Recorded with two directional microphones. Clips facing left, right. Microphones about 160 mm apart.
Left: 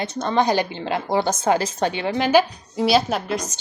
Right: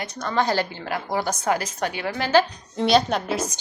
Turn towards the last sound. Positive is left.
turn(degrees=-5)  # may be behind; listen again after turning